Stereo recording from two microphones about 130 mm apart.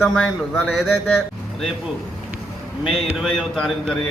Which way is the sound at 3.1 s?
Centre (ahead or behind).